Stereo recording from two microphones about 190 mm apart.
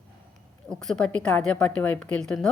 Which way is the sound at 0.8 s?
5° left (ahead or behind).